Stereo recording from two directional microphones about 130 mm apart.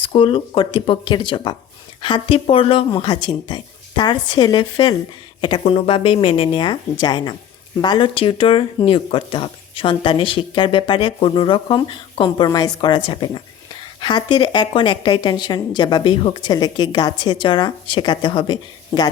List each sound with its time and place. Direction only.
0.0 s speech: 40° left (ahead or behind)